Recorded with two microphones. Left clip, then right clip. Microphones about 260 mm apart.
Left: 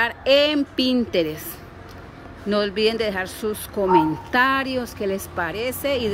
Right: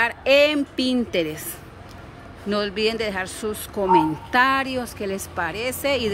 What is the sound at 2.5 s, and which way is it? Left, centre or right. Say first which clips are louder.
A woman's voice: left 2 dB; centre.